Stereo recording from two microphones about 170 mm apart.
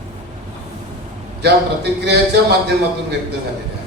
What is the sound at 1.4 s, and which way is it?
A man's voice, 75° right (ahead or behind).